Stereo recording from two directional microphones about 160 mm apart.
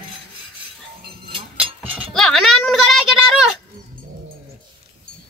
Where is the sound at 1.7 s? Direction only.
35° right (ahead or behind).